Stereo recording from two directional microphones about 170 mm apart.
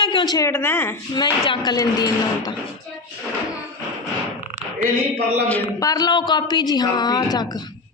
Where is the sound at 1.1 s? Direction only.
25° left (ahead or behind).